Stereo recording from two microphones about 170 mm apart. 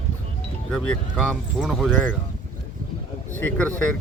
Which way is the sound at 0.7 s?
Centre (ahead or behind).